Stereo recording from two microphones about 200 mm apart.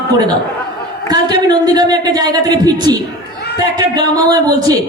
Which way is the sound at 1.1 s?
20° right (ahead or behind).